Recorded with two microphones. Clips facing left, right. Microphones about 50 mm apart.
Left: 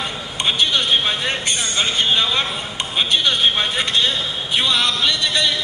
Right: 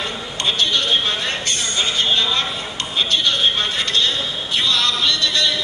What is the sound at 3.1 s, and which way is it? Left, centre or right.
Vehicle, centre.